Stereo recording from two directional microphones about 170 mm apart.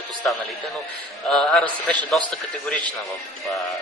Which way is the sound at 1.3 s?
5° left (ahead or behind).